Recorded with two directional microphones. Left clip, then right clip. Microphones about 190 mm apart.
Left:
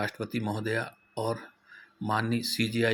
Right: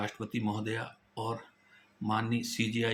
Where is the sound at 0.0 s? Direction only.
35° left (ahead or behind).